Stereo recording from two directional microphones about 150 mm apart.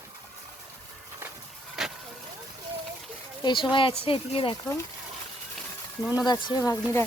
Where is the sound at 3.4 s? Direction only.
35° left (ahead or behind).